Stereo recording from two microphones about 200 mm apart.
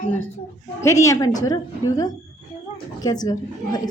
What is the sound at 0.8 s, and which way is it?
A woman's voice, 15° left (ahead or behind).